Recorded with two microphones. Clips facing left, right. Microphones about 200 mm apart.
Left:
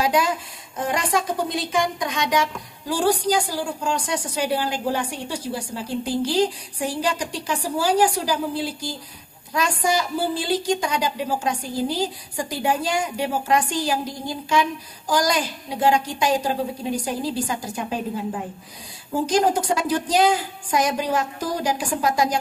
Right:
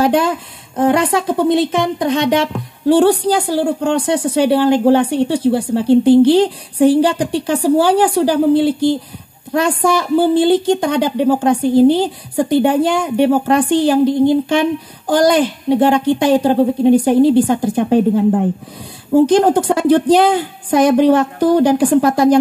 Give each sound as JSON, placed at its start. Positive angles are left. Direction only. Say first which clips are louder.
{"t": 0.0, "sound": "a woman's voice", "louder": "right 7 dB", "side_deg": -55}